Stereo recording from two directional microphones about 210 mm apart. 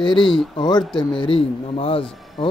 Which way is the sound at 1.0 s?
25° left (ahead or behind).